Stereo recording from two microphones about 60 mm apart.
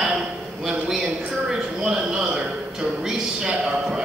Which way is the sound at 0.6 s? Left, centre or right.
Centre.